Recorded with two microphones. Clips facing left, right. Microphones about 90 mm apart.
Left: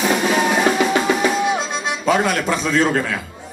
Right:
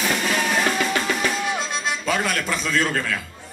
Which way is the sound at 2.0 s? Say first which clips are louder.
Left 8 dB; 20° left (ahead or behind).